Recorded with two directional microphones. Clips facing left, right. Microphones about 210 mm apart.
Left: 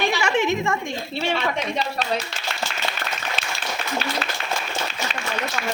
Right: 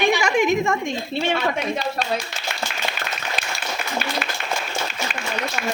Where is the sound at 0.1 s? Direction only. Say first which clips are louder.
Right 3 dB; 15° right (ahead or behind).